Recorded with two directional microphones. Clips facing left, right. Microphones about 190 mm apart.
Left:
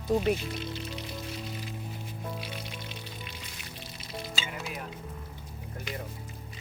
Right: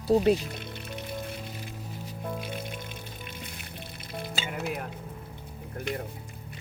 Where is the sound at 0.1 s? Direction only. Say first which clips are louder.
Right 5 dB; 35° right (ahead or behind).